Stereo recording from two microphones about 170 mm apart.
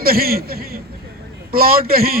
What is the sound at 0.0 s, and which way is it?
A man's voice, 60° right (ahead or behind).